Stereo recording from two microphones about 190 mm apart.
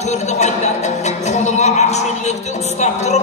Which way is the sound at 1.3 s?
40° left (ahead or behind).